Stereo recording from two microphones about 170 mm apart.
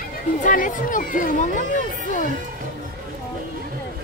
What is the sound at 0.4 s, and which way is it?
Speech, 50° left (ahead or behind).